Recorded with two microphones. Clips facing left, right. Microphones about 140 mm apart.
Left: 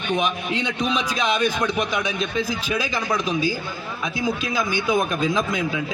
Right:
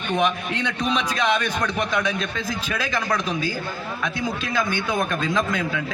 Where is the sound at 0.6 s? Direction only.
10° left (ahead or behind).